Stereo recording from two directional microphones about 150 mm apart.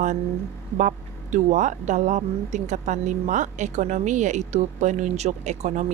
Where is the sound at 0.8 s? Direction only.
55° right (ahead or behind).